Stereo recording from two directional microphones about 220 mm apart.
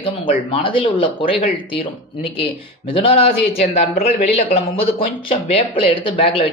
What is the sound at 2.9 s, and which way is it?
A man's voice, 25° left (ahead or behind).